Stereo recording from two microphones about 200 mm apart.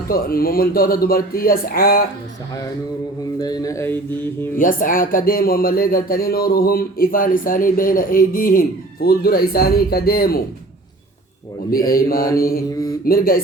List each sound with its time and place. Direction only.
0.1 s speech: 45° left (ahead or behind)
3.3 s mantra: 20° left (ahead or behind)
4.5 s speech: 45° left (ahead or behind)
11.9 s speech: 45° left (ahead or behind)